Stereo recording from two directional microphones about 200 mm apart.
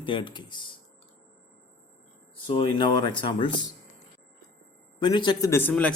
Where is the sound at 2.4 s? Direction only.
25° left (ahead or behind).